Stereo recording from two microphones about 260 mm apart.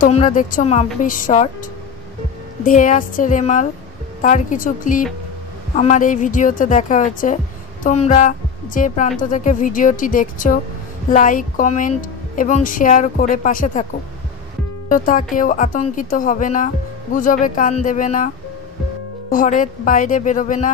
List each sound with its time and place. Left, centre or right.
0.0 s a woman's voice: left
2.6 s a woman's voice: left
14.9 s speech: left
19.3 s speech: left